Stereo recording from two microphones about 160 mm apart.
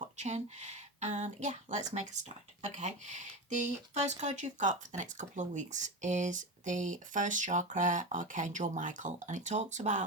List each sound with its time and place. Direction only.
0.2 s speech: 45° right (ahead or behind)